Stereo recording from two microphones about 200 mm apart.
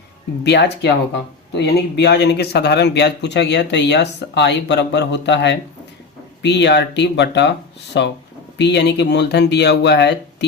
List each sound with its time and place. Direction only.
0.4 s speech: 60° left (ahead or behind)